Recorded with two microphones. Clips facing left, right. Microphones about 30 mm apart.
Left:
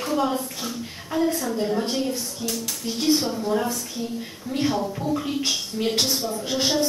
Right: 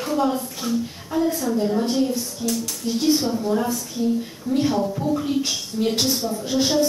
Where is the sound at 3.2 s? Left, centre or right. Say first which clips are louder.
Right 2 dB; centre.